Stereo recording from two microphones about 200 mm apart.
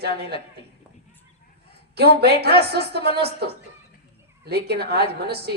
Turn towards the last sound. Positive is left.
turn(degrees=-55)  # may be behind; listen again after turning